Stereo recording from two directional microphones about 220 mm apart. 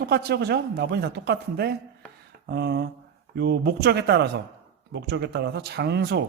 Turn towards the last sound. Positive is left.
turn(degrees=-50)  # may be behind; listen again after turning